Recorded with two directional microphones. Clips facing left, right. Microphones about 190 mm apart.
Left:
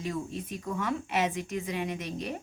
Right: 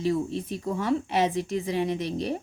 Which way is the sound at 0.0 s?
30° right (ahead or behind).